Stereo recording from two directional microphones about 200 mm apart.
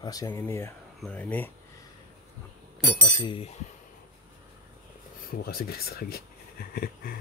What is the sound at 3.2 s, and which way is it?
Speech, 25° left (ahead or behind).